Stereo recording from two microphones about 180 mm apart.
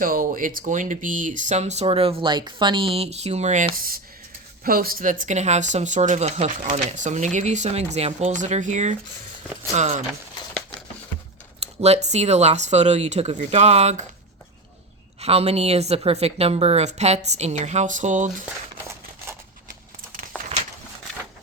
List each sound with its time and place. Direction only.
0.0 s speech: 50° right (ahead or behind)
5.2 s speech: 40° right (ahead or behind)
11.6 s speech: 35° right (ahead or behind)
15.2 s speech: 35° right (ahead or behind)
18.7 s a sound: 15° right (ahead or behind)
20.3 s walk: 10° left (ahead or behind)